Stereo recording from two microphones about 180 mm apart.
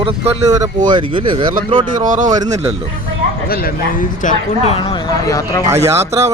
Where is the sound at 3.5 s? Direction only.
55° left (ahead or behind).